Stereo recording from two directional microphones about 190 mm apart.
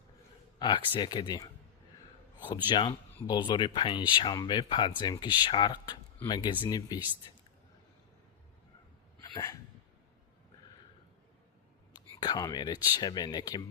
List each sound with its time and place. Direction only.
0.6 s speech: 20° left (ahead or behind)
3.2 s speech: 25° left (ahead or behind)
9.3 s hiccup: 20° left (ahead or behind)
11.9 s speech: 20° left (ahead or behind)